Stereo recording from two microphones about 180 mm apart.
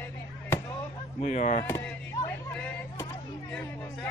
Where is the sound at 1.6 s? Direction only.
15° left (ahead or behind).